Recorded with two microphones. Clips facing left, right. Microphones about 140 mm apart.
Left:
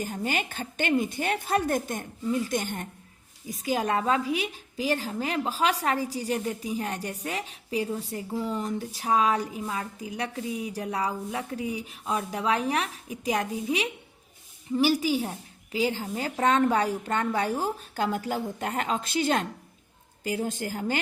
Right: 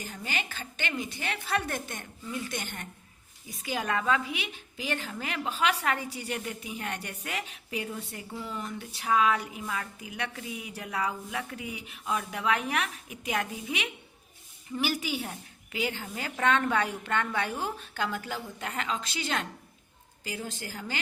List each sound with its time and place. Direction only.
0.0 s a woman's voice: 45° left (ahead or behind)